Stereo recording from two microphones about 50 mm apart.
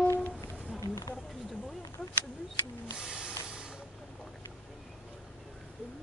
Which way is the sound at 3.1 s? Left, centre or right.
Centre.